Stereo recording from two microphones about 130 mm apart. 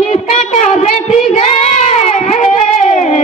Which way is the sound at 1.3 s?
60° left (ahead or behind).